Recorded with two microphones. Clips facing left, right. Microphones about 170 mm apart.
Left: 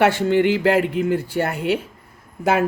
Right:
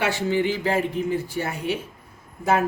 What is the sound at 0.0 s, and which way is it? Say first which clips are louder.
Speech: left 6 dB; 60° left (ahead or behind).